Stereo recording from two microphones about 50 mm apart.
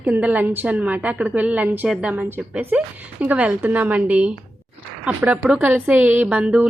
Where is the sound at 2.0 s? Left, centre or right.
Right.